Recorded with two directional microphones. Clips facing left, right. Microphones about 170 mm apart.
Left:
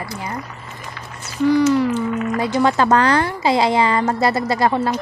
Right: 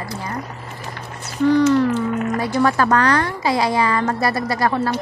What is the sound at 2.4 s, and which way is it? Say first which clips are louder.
A woman's voice: left 2 dB; 20° left (ahead or behind).